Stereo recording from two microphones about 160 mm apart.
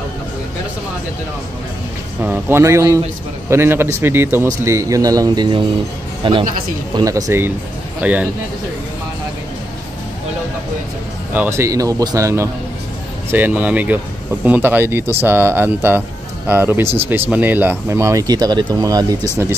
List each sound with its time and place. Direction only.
2.2 s speech: 15° right (ahead or behind)
11.3 s speech: 15° right (ahead or behind)